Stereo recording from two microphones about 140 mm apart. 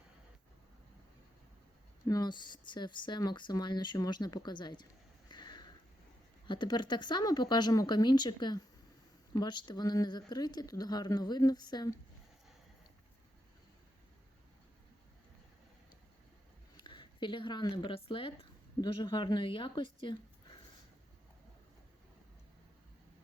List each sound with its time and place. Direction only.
2.0 s speech: 30° left (ahead or behind)
5.3 s a sound: 30° left (ahead or behind)
6.5 s speech: 35° left (ahead or behind)
16.7 s a woman's voice: 35° left (ahead or behind)